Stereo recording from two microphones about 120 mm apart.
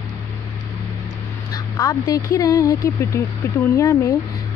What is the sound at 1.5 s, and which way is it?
Speech, 30° left (ahead or behind).